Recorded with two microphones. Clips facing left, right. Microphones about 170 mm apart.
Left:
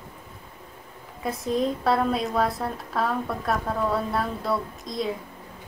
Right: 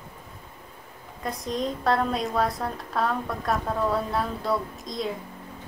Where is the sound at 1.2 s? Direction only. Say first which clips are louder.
Left 4 dB; 5° left (ahead or behind).